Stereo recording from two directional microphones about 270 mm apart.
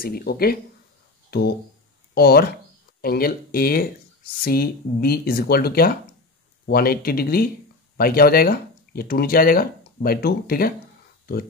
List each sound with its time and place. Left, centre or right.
0.0 s speech: left